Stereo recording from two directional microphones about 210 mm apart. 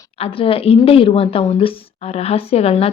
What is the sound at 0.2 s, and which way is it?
Speech, 25° left (ahead or behind).